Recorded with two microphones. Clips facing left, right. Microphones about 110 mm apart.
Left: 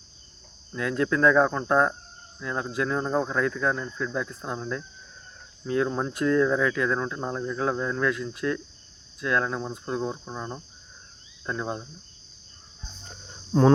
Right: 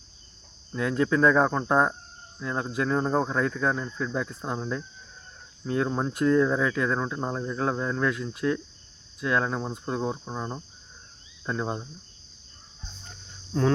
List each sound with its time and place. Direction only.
0.7 s speech: centre (ahead or behind)
1.5 s cricket: 10° right (ahead or behind)
2.4 s speech: 5° right (ahead or behind)
13.5 s speech: 30° left (ahead or behind)